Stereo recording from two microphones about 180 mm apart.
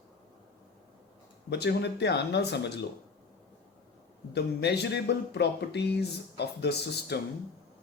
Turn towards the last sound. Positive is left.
turn(degrees=65)  # may be behind; listen again after turning